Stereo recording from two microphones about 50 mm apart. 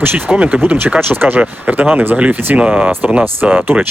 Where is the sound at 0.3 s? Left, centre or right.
Right.